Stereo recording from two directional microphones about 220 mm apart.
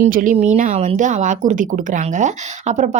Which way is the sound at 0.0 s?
40° right (ahead or behind).